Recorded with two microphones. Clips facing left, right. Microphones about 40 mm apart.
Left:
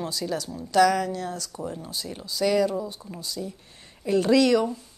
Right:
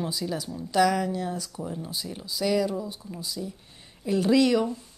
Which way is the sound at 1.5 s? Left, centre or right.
Centre.